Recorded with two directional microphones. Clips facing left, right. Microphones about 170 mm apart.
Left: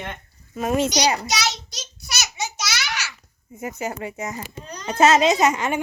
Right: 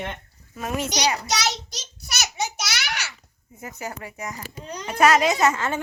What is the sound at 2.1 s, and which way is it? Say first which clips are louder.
Babbling: right 1 dB; 50° right (ahead or behind).